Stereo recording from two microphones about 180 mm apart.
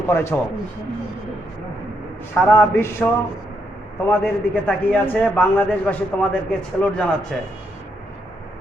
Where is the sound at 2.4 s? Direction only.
10° left (ahead or behind).